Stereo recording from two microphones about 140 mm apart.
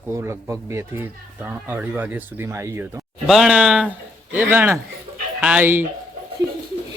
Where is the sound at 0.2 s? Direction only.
20° right (ahead or behind).